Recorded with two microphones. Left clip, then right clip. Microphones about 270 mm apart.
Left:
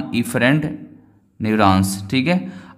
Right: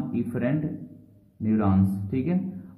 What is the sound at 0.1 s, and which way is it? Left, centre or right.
Speech, left.